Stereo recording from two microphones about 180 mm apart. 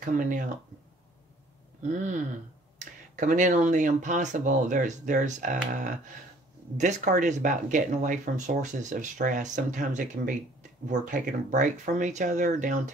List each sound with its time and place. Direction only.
0.0 s speech: 45° right (ahead or behind)
1.8 s speech: 45° right (ahead or behind)